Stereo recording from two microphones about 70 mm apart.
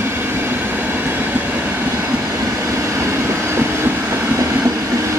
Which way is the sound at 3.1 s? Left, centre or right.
Right.